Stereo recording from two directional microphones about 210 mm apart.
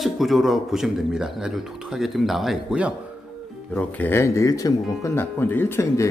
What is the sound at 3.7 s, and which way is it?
A man's voice, 5° left (ahead or behind).